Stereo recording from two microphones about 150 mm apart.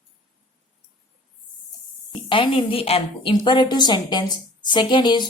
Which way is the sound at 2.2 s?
35° left (ahead or behind).